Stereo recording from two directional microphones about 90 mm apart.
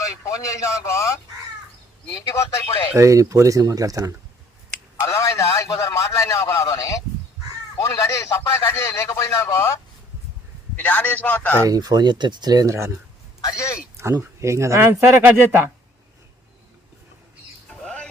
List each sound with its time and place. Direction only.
0.4 s speech: 35° left (ahead or behind)
2.1 s speech: 35° left (ahead or behind)
2.9 s speech: 35° right (ahead or behind)
5.0 s speech: 35° left (ahead or behind)
10.8 s a man's voice: 15° left (ahead or behind)
11.7 s speech: 45° right (ahead or behind); by 13.0 s 30° right (ahead or behind)
13.4 s speech: 35° left (ahead or behind)
13.9 s speech: 30° right (ahead or behind)
17.7 s bird: 10° left (ahead or behind)